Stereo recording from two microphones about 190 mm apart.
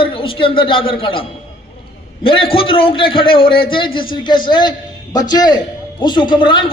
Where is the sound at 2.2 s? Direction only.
30° left (ahead or behind).